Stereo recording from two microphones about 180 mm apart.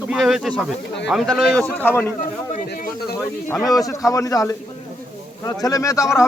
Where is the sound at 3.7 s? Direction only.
20° left (ahead or behind).